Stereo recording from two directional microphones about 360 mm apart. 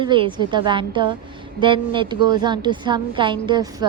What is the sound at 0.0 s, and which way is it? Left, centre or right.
A woman's voice, centre.